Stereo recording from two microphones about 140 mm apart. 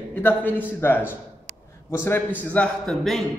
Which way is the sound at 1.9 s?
15° left (ahead or behind).